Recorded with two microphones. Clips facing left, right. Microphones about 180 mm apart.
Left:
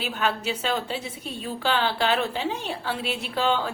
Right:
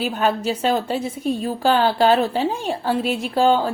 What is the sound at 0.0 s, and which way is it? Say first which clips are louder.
A woman's voice: right 6 dB; 40° right (ahead or behind).